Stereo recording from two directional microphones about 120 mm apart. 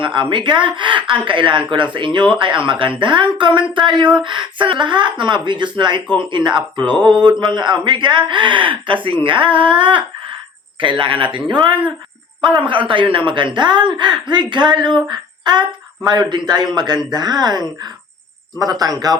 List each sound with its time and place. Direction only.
0.0 s a woman's voice: 45° right (ahead or behind)
15.1 s a sound: 40° right (ahead or behind)
16.0 s a woman's voice: 35° right (ahead or behind)